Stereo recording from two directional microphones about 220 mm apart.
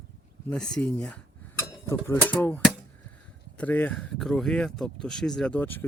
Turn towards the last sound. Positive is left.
turn(degrees=10)  # may be behind; listen again after turning